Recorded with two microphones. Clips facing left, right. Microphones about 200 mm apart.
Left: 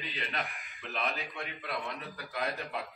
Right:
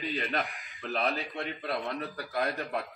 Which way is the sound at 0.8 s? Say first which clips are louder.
Right 5 dB; 35° right (ahead or behind).